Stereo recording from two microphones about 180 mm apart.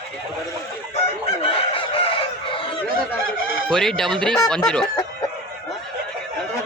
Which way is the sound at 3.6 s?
5° left (ahead or behind).